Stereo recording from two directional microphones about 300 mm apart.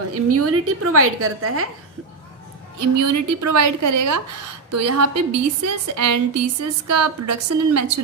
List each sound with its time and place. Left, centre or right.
0.1 s a woman's voice: right
3.0 s a woman's voice: right
4.7 s a woman's voice: right